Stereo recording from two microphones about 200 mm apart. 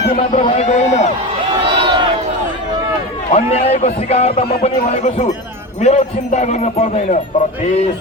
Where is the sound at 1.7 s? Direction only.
25° right (ahead or behind).